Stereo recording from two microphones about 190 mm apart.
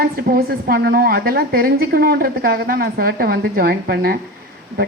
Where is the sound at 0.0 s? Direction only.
50° right (ahead or behind).